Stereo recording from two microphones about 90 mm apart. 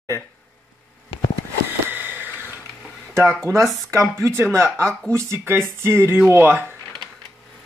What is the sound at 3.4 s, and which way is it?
Speech, 30° right (ahead or behind).